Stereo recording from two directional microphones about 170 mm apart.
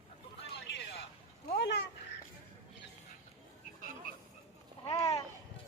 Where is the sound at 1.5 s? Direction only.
90° left.